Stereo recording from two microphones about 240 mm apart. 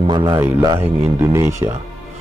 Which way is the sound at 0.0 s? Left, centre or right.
Centre.